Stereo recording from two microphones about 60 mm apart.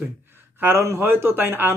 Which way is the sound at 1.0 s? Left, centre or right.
Right.